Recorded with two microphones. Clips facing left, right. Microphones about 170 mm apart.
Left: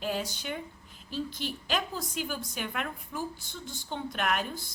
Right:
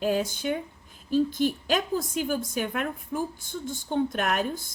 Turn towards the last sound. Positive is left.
turn(degrees=-50)  # may be behind; listen again after turning